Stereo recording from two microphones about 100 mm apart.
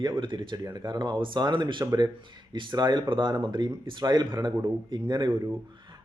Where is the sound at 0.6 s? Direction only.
40° right (ahead or behind).